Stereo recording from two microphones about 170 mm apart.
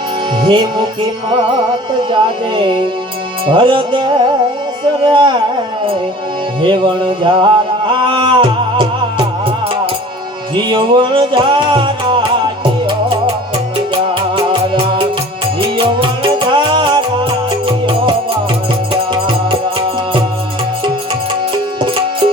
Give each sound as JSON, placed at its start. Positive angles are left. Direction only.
{"t": 0.4, "sound": "speech", "side_deg": -30}
{"t": 2.0, "sound": "speech", "side_deg": -30}
{"t": 6.6, "sound": "music", "side_deg": -30}
{"t": 10.5, "sound": "music", "side_deg": -30}